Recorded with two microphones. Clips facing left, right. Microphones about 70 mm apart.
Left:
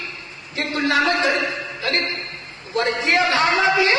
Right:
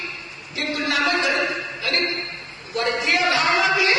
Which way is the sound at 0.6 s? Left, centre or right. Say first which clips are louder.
Left 3 dB; left.